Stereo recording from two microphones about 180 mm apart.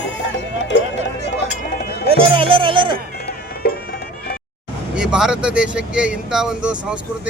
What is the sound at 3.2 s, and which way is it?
Music, 60° left (ahead or behind).